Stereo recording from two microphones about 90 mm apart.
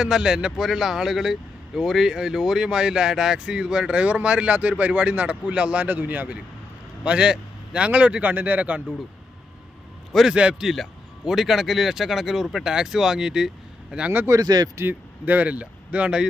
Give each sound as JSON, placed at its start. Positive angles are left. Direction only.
{"t": 0.0, "sound": "speech", "side_deg": -5}
{"t": 10.1, "sound": "a man's voice", "side_deg": 0}
{"t": 14.3, "sound": "speech", "side_deg": -45}
{"t": 14.8, "sound": "speech", "side_deg": -20}